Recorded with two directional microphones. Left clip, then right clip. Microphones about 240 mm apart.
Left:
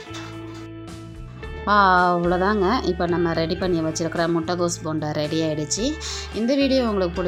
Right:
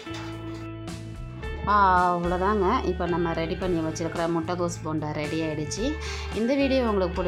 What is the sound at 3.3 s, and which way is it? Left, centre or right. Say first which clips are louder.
Speech: left 5 dB; centre.